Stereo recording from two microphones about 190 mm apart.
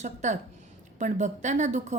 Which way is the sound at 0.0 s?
40° right (ahead or behind).